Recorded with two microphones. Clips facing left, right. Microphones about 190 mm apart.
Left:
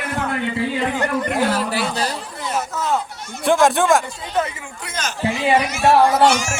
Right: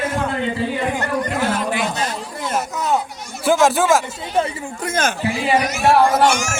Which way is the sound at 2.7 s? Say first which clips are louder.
Right 2 dB; 15° right (ahead or behind).